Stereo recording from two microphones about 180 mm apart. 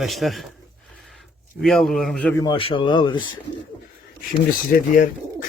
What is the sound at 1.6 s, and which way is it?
Speech, centre (ahead or behind).